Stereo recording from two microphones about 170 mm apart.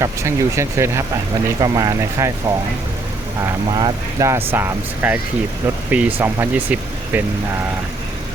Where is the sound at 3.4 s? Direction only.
20° right (ahead or behind).